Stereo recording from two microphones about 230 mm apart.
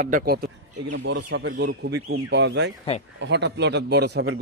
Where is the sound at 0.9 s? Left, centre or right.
Right.